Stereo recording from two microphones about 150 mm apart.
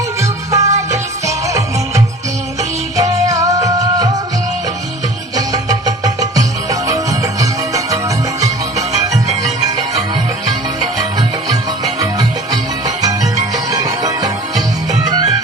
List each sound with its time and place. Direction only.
0.2 s music: 20° right (ahead or behind)
3.0 s music: 25° right (ahead or behind)
5.6 s music: 25° right (ahead or behind)
13.0 s music: 25° right (ahead or behind)